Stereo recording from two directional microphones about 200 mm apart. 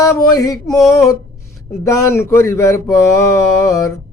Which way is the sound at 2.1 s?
15° left (ahead or behind).